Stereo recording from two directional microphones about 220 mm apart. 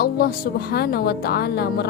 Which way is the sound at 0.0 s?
45° left (ahead or behind).